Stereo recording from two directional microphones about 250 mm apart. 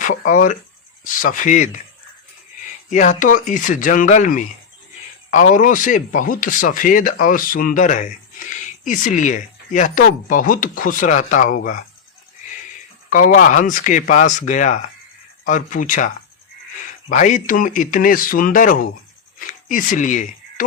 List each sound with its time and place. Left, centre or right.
0.3 s speech: left
2.9 s speech: left
13.1 s speech: left
19.4 s a sound: left